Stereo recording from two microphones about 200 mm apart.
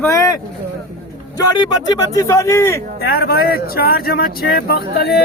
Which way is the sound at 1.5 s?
20° left (ahead or behind).